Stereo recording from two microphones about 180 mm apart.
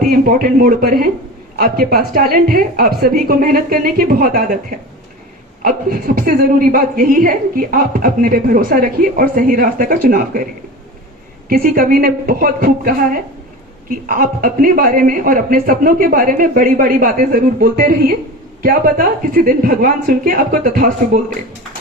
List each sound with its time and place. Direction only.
0.3 s a woman's voice: 50° right (ahead or behind)
5.6 s a woman's voice: 50° right (ahead or behind)
11.4 s a woman's voice: 55° right (ahead or behind)